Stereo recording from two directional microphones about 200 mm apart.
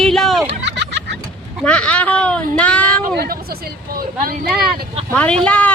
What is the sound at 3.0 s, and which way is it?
Speech, 50° right (ahead or behind).